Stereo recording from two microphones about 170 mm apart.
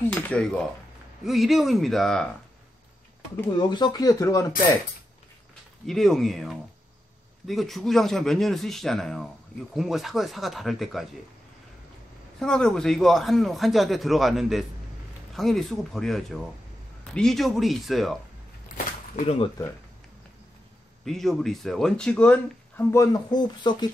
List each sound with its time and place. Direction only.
0.0 s speech: 5° left (ahead or behind)
3.5 s speech: 25° left (ahead or behind)
5.9 s speech: centre (ahead or behind)
12.4 s speech: 5° left (ahead or behind)
19.2 s speech: 30° left (ahead or behind)
21.0 s speech: centre (ahead or behind); by 23.9 s 25° left (ahead or behind)